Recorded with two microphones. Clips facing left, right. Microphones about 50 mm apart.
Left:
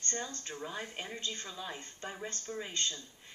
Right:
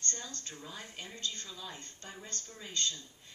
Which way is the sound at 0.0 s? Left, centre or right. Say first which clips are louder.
Left 3 dB; left.